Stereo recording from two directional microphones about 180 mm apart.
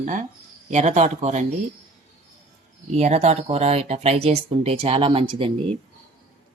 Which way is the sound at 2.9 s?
40° right (ahead or behind).